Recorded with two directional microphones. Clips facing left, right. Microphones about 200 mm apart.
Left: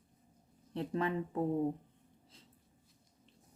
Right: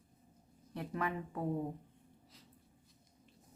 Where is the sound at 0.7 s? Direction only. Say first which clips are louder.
Left 4 dB; 25° left (ahead or behind).